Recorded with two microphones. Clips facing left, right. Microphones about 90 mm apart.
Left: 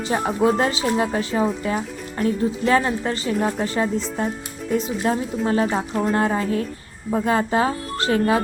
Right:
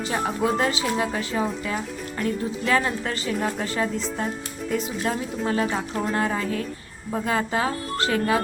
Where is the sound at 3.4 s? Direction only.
15° left (ahead or behind).